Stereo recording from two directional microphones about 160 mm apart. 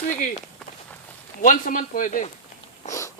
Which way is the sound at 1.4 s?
55° left (ahead or behind).